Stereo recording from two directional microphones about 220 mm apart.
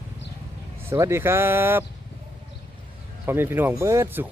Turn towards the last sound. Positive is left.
turn(degrees=-10)  # may be behind; listen again after turning